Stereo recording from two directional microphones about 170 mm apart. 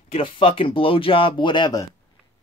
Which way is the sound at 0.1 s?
30° left (ahead or behind).